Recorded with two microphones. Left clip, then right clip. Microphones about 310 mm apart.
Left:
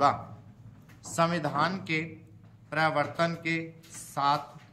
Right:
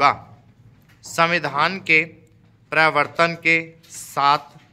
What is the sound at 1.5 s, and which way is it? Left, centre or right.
Speech, centre.